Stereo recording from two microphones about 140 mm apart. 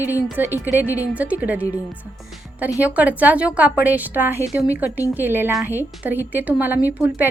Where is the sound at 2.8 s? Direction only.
10° right (ahead or behind).